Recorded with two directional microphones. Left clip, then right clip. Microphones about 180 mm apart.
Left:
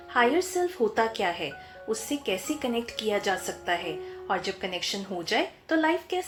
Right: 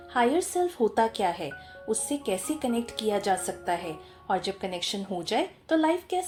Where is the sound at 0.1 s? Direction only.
45° right (ahead or behind).